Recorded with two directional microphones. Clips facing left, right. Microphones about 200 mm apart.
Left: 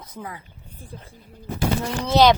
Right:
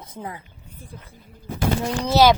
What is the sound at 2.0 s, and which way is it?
Speech, 5° right (ahead or behind).